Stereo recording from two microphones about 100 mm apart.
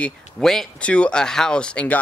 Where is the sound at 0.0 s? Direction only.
5° left (ahead or behind).